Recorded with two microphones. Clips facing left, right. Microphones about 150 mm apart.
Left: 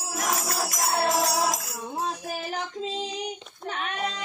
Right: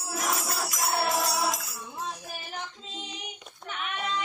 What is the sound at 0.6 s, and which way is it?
Music, 40° left (ahead or behind).